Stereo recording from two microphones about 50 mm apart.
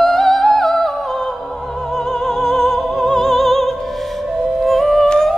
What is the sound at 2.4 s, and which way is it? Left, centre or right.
Opera, centre.